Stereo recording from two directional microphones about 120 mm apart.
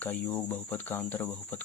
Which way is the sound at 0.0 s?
15° left (ahead or behind).